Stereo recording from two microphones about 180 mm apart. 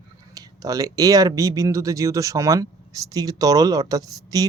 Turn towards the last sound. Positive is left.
turn(degrees=-20)  # may be behind; listen again after turning